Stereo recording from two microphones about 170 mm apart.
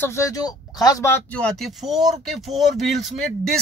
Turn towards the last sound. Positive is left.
turn(degrees=0)  # may be behind; listen again after turning